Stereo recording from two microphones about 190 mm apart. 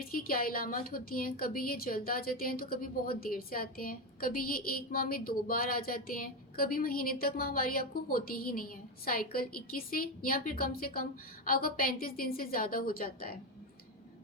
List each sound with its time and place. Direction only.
0.0 s a woman's voice: 50° left (ahead or behind)